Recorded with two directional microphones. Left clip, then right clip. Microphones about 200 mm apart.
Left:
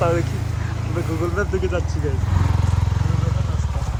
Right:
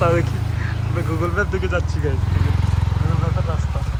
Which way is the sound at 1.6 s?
15° left (ahead or behind).